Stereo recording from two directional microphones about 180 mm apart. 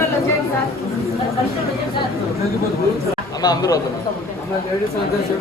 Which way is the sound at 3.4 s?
20° left (ahead or behind).